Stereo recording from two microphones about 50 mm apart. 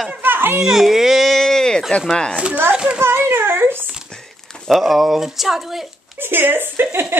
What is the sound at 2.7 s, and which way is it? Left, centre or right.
Children playing, centre.